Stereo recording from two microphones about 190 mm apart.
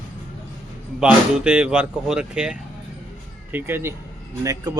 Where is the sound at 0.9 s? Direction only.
5° right (ahead or behind).